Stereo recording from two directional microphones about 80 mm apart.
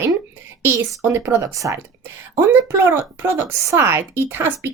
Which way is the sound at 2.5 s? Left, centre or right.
Right.